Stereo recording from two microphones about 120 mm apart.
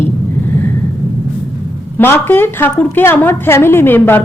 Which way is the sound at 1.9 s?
20° left (ahead or behind).